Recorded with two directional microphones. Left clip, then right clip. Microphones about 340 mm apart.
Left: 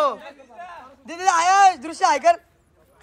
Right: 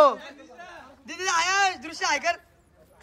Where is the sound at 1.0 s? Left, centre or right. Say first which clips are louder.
Left 7 dB; centre.